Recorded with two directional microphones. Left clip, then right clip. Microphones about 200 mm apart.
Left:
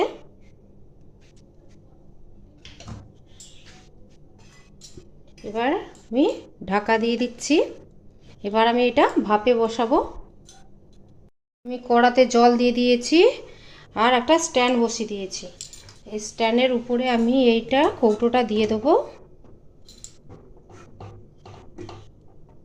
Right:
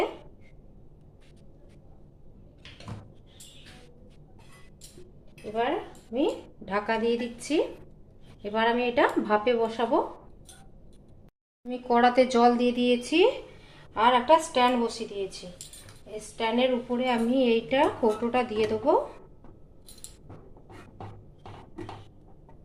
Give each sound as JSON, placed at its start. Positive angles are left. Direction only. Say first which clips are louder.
{"t": 5.5, "sound": "speech", "louder": "left 4 dB", "side_deg": 50}
{"t": 11.7, "sound": "speech", "louder": "left 4 dB", "side_deg": 20}
{"t": 13.7, "sound": "speech", "louder": "left 3 dB", "side_deg": 50}
{"t": 16.3, "sound": "speech", "louder": "left 5 dB", "side_deg": 55}